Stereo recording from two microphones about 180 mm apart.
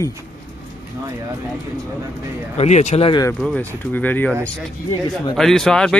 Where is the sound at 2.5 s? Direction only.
40° left (ahead or behind).